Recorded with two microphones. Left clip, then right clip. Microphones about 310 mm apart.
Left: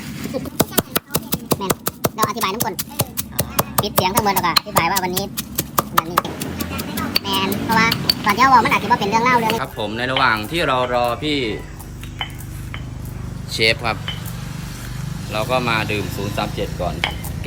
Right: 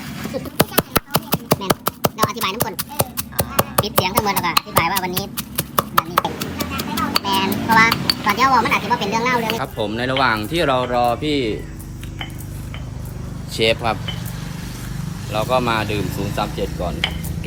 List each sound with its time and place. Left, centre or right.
0.9 s a sound: centre
6.2 s a child's voice: centre
13.5 s speech: centre
15.3 s speech: centre
16.0 s speech: right
16.3 s speech: centre